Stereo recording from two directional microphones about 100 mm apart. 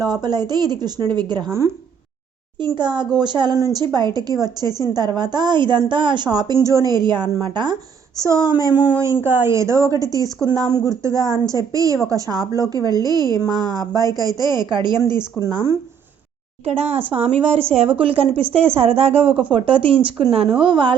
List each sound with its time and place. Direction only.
0.0 s a woman's voice: 45° right (ahead or behind)
1.5 s a woman's voice: 30° right (ahead or behind)
2.6 s a woman's voice: 50° right (ahead or behind)
6.7 s a woman's voice: 30° right (ahead or behind)
6.9 s a woman's voice: 45° right (ahead or behind)
8.2 s a woman's voice: 30° right (ahead or behind)
8.7 s a woman's voice: 15° right (ahead or behind); by 15.3 s 45° right (ahead or behind)
16.6 s a woman's voice: 90° right
18.0 s a woman's voice: 65° right (ahead or behind); by 19.3 s 90° right
19.3 s speech: 15° right (ahead or behind)
19.5 s speech: 60° right (ahead or behind)